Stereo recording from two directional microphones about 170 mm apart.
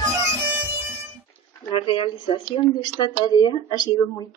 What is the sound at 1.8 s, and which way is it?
Speech, 30° left (ahead or behind).